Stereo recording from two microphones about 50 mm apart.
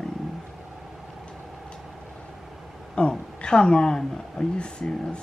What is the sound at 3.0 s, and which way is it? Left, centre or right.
A woman's voice, centre.